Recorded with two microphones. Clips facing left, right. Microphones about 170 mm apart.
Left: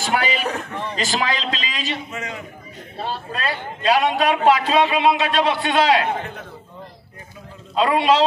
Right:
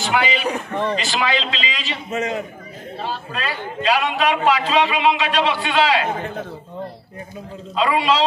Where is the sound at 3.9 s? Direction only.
40° left (ahead or behind).